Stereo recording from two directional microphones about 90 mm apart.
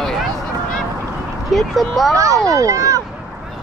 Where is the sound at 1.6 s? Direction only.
Centre (ahead or behind).